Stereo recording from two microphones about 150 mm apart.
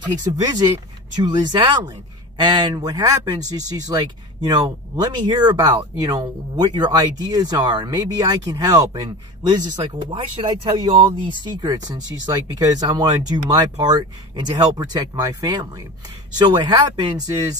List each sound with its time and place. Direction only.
0.0 s speech: 25° right (ahead or behind)